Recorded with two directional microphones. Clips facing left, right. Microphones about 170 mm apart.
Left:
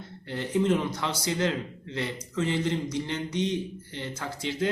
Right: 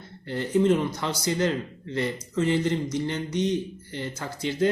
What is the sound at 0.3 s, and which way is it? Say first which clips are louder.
A man's voice: right 4 dB; centre (ahead or behind).